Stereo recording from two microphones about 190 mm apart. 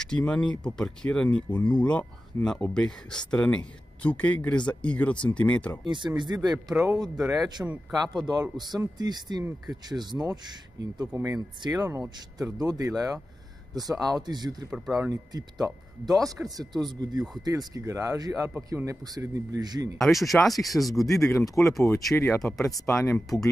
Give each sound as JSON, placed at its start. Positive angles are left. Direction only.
{"t": 0.0, "sound": "speech", "side_deg": 5}
{"t": 5.9, "sound": "speech", "side_deg": -25}
{"t": 6.7, "sound": "speech", "side_deg": -5}
{"t": 7.2, "sound": "speech", "side_deg": -20}
{"t": 14.7, "sound": "speech", "side_deg": -5}
{"t": 15.0, "sound": "speech", "side_deg": -20}
{"t": 20.0, "sound": "speech", "side_deg": 0}
{"t": 21.3, "sound": "speech", "side_deg": 15}
{"t": 22.3, "sound": "speech", "side_deg": 0}
{"t": 22.6, "sound": "speech", "side_deg": 15}